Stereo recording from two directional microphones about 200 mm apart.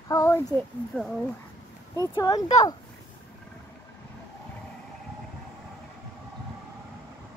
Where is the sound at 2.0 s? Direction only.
20° left (ahead or behind).